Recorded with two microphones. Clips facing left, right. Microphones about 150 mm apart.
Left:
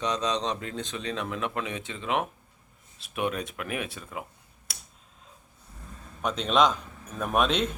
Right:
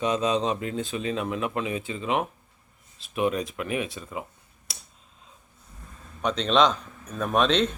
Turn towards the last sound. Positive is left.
turn(degrees=10)  # may be behind; listen again after turning